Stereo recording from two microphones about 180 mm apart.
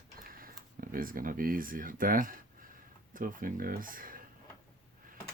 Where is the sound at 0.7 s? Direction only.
50° right (ahead or behind).